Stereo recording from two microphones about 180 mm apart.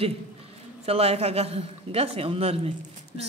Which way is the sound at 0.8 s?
35° right (ahead or behind).